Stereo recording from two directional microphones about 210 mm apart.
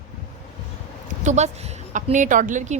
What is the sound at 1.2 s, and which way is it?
A woman's voice, 35° right (ahead or behind).